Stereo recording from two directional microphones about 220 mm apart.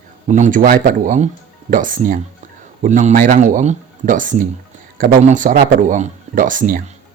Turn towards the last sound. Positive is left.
turn(degrees=-35)  # may be behind; listen again after turning